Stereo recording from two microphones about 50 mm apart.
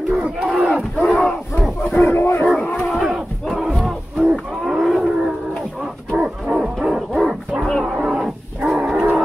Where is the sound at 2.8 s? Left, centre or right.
Centre.